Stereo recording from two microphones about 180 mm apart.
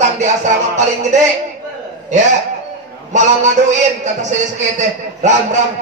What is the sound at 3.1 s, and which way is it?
Speech, 40° right (ahead or behind).